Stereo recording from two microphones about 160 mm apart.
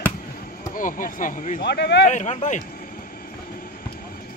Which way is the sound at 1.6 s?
90° left.